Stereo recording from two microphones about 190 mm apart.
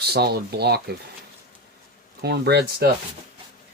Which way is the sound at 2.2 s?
60° right (ahead or behind).